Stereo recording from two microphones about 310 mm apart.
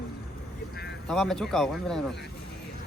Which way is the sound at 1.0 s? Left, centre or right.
Centre.